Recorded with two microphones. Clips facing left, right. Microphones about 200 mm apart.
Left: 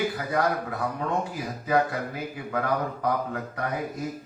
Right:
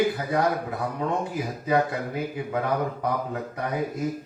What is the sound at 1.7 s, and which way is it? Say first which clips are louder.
Speech: even; 25° right (ahead or behind).